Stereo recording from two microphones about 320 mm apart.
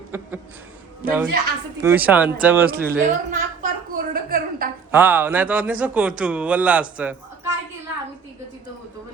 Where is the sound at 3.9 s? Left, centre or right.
Right.